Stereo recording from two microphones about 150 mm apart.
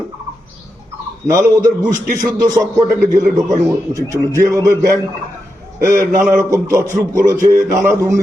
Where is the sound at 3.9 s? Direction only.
20° right (ahead or behind).